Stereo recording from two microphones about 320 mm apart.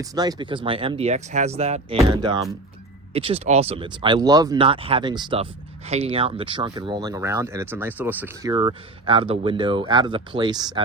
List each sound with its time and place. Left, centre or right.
0.0 s speech: centre